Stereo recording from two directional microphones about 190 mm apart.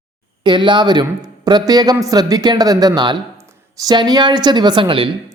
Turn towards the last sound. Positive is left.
turn(degrees=-25)  # may be behind; listen again after turning